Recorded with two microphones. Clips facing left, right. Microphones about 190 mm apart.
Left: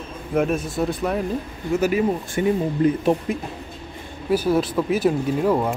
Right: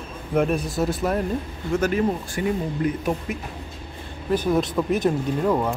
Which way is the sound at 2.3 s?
25° left (ahead or behind).